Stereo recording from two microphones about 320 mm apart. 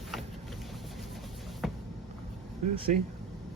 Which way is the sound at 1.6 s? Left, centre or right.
Centre.